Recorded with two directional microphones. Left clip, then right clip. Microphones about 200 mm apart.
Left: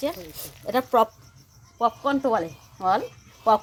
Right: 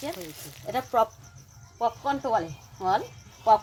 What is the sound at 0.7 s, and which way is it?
A woman's voice, 50° left (ahead or behind).